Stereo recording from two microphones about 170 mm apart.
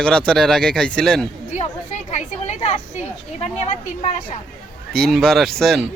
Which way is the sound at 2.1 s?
45° left (ahead or behind).